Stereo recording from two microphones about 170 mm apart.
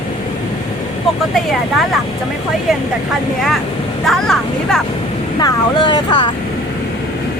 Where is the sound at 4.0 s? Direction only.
Centre (ahead or behind).